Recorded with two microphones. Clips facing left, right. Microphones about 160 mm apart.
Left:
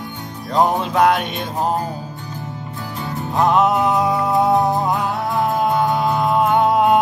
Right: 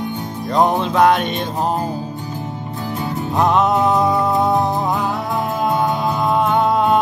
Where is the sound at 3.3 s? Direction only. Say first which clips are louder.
Even; centre (ahead or behind).